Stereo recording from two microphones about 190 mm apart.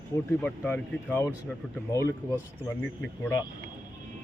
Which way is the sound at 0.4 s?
10° left (ahead or behind).